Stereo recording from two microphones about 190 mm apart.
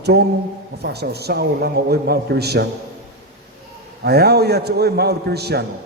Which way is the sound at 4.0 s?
60° right (ahead or behind).